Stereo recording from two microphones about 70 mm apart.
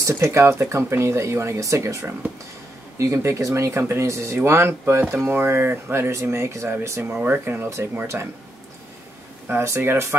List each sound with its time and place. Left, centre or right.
0.1 s speech: right
7.0 s speech: right
9.5 s speech: right